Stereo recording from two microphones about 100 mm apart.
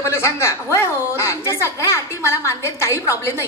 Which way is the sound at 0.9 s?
30° left (ahead or behind).